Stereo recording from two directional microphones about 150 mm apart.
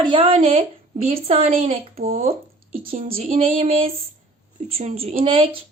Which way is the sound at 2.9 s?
75° right (ahead or behind).